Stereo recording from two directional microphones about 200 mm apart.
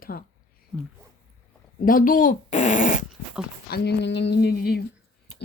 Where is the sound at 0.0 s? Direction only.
45° left (ahead or behind).